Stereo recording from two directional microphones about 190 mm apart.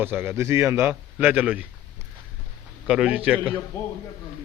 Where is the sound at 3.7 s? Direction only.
15° left (ahead or behind).